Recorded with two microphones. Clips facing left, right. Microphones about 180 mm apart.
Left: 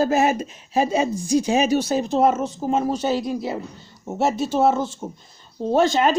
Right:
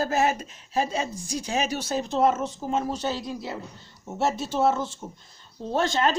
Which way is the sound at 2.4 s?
40° left (ahead or behind).